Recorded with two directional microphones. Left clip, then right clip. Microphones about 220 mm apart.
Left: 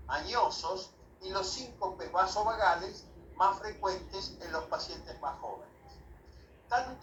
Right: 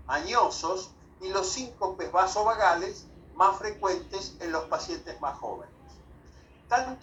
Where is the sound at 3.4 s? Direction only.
30° right (ahead or behind).